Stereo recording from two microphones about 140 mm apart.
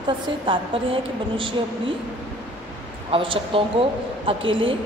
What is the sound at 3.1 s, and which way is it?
A woman's voice, 40° right (ahead or behind).